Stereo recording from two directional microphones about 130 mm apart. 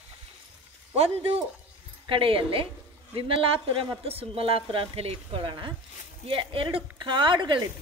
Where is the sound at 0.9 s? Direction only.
50° right (ahead or behind).